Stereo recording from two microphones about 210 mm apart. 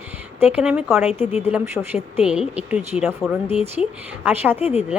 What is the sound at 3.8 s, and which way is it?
Speech, 30° left (ahead or behind).